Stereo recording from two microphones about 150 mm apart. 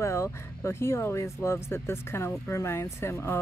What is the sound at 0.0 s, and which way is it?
Speech, 20° left (ahead or behind).